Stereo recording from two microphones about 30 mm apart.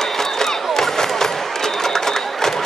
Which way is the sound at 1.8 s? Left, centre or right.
Centre.